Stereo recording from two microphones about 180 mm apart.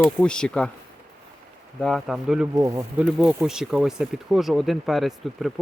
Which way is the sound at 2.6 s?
15° right (ahead or behind).